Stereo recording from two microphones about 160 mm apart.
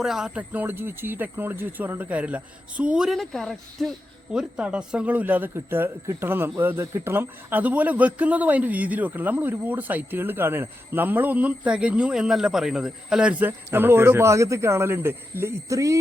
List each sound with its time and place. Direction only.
0.0 s a man's voice: 5° right (ahead or behind); by 16.0 s 20° right (ahead or behind)